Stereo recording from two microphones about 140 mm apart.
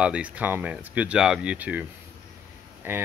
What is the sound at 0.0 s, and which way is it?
Speech, 10° right (ahead or behind).